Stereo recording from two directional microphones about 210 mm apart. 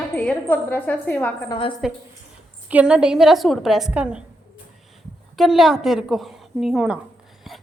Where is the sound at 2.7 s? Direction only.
5° right (ahead or behind).